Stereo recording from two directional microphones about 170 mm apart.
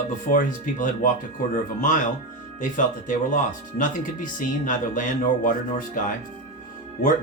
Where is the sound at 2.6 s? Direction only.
50° left (ahead or behind).